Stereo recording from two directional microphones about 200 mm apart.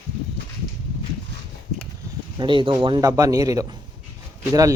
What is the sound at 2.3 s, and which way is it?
Speech, 25° right (ahead or behind).